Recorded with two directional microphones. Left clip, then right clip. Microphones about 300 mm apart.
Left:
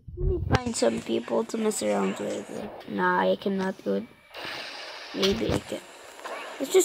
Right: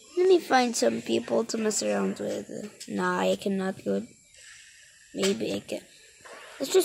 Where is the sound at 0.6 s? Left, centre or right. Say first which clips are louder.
Right 2 dB; centre.